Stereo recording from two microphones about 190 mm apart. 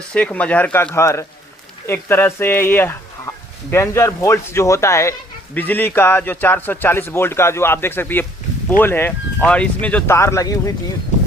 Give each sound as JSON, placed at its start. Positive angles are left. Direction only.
{"t": 0.1, "sound": "speech", "side_deg": 5}